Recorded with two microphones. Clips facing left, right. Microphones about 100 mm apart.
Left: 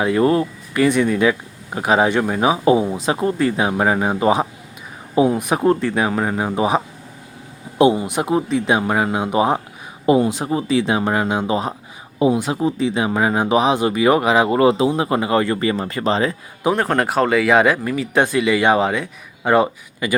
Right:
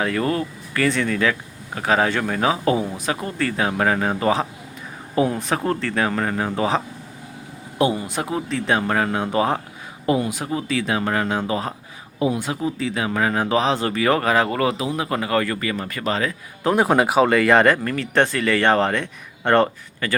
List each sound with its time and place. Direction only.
0.0 s speech: 20° left (ahead or behind)
16.7 s speech: 10° right (ahead or behind); by 20.1 s 10° left (ahead or behind)